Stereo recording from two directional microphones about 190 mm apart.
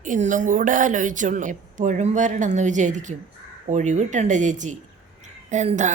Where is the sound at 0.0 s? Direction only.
40° right (ahead or behind).